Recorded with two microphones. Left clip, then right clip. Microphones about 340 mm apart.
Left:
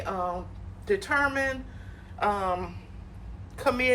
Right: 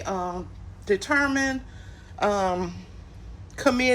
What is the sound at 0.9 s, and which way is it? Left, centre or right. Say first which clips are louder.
A man's voice: right 3 dB; centre.